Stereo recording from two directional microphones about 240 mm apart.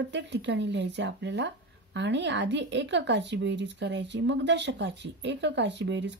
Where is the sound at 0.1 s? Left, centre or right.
Right.